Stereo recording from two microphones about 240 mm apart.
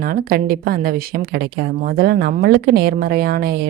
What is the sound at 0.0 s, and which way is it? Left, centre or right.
Speech, right.